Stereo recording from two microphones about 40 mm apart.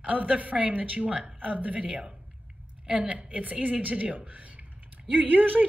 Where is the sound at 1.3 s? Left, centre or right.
Right.